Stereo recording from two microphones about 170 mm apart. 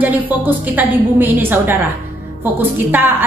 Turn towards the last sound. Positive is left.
turn(degrees=-10)  # may be behind; listen again after turning